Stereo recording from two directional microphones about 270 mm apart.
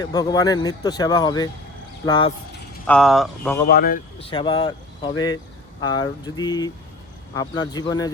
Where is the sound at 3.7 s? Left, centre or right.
Left.